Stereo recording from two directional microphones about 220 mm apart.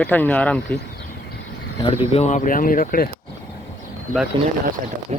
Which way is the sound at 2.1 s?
30° left (ahead or behind).